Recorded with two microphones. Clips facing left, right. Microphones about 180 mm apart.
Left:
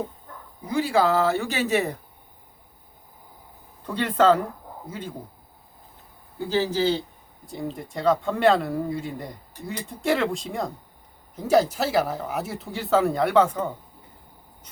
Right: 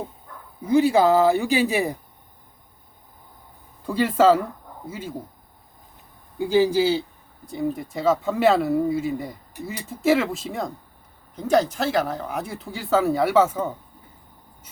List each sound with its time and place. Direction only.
0.6 s speech: 20° right (ahead or behind)
3.8 s speech: 10° right (ahead or behind)
6.4 s speech: 10° right (ahead or behind)